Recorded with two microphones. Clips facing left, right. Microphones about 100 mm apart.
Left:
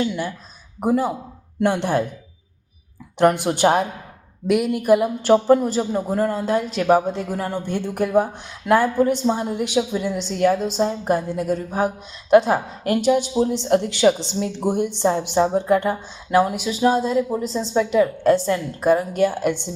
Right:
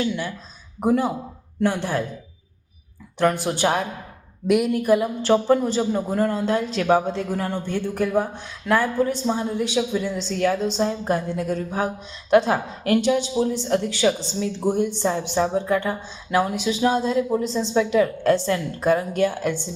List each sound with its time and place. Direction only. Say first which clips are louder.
0.8 s speech: even; 5° left (ahead or behind)
1.6 s speech: left 3 dB; 20° left (ahead or behind)
3.2 s speech: left 4 dB; 20° left (ahead or behind)
4.4 s speech: even; centre (ahead or behind)
4.8 s speech: left 2 dB; 10° left (ahead or behind)
13.4 s speech: left 3 dB; 20° left (ahead or behind)
15.9 s speech: left 4 dB; 10° left (ahead or behind)